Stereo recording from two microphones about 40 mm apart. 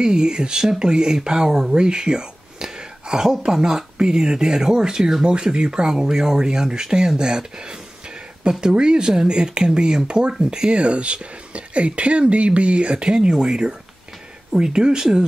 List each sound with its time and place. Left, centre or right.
0.0 s speech: centre
10.8 s speech: right